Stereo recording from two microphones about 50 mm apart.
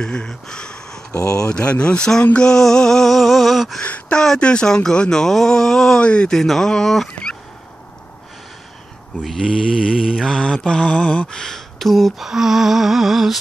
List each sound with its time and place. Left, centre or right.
0.0 s speech: centre
1.1 s speech: left
1.4 s mantra: centre
2.3 s a sound: centre
3.8 s a sound: left
4.2 s speech: centre
5.9 s speech: left
6.3 s speech: centre
7.1 s fowl: centre
10.2 s mantra: centre
12.3 s humming: centre